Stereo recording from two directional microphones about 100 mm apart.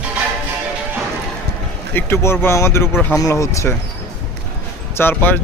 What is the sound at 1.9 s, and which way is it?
A man's voice, 20° left (ahead or behind).